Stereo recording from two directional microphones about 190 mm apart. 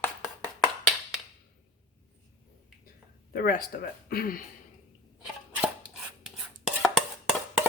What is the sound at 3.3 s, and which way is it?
Speech, 50° left (ahead or behind).